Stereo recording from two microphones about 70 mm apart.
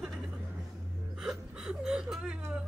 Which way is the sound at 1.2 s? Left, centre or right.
Centre.